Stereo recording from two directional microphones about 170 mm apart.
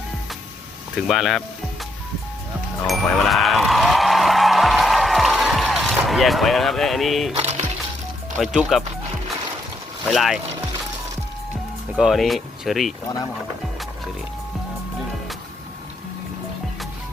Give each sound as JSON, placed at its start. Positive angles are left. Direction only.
{"t": 0.9, "sound": "speech", "side_deg": 0}
{"t": 2.8, "sound": "music", "side_deg": 0}
{"t": 7.3, "sound": "music", "side_deg": -40}
{"t": 8.4, "sound": "speech", "side_deg": 0}
{"t": 10.1, "sound": "speech", "side_deg": 0}
{"t": 11.9, "sound": "speech", "side_deg": 0}